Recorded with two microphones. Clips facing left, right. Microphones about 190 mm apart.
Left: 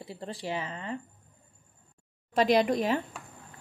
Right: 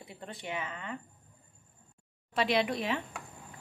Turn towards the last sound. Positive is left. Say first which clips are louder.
# left 5 dB
turn(degrees=40)  # may be behind; listen again after turning